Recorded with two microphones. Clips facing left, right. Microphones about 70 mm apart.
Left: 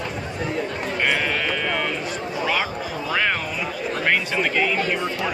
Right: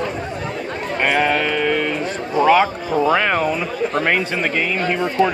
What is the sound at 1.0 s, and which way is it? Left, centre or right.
Speech, right.